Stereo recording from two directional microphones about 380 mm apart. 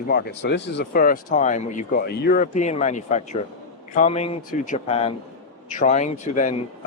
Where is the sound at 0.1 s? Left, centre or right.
Left.